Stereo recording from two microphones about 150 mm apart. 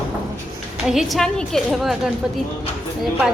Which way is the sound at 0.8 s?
Centre (ahead or behind).